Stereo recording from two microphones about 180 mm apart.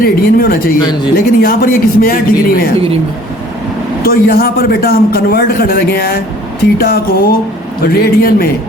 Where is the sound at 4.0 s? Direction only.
55° left (ahead or behind).